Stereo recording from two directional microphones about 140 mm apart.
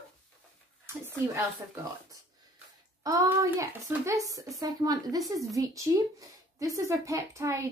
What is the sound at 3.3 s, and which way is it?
A woman's voice, 15° right (ahead or behind).